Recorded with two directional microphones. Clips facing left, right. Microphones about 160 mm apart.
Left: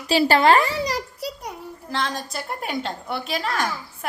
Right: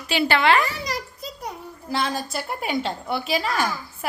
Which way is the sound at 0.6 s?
35° left (ahead or behind).